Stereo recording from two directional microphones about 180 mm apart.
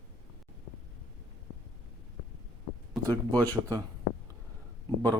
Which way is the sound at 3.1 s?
20° right (ahead or behind).